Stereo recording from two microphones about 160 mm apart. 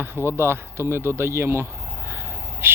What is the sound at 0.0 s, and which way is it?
Speech, 15° right (ahead or behind).